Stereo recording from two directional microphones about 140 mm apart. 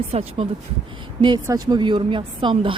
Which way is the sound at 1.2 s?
35° right (ahead or behind).